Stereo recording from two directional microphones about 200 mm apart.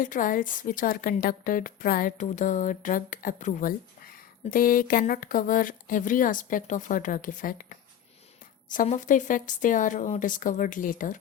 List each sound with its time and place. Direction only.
0.0 s a woman's voice: 40° left (ahead or behind)